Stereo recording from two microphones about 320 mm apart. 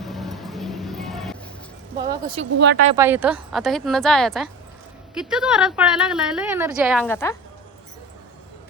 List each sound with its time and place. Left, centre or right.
0.0 s vehicle: centre
2.0 s speech: centre
2.4 s speech: right
2.9 s a woman's voice: centre